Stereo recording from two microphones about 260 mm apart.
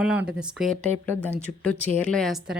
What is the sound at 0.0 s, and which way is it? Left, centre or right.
A woman's voice, centre.